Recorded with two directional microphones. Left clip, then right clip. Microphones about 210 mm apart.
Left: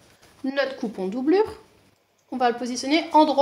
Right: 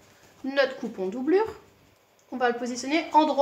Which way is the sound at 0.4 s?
40° left (ahead or behind).